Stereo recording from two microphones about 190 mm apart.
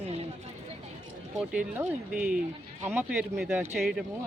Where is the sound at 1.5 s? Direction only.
10° right (ahead or behind).